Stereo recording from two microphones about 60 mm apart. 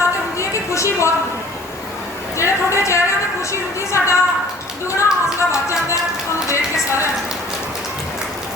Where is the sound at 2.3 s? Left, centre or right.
Left.